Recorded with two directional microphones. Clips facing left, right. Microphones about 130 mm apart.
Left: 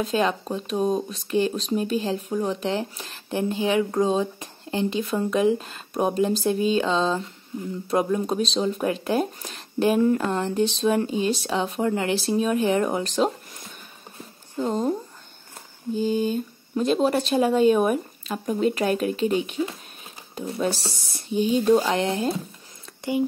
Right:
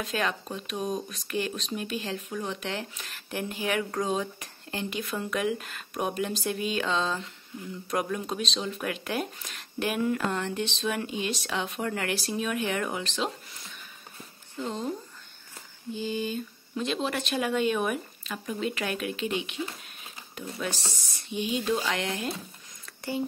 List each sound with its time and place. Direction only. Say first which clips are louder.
0.0 s speech: left 7 dB; 30° left (ahead or behind)
11.8 s speech: left 7 dB; 25° left (ahead or behind)